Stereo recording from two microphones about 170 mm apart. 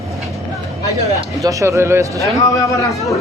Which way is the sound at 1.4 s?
20° right (ahead or behind).